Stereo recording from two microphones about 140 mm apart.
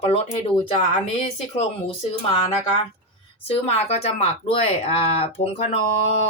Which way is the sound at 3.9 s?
45° left (ahead or behind).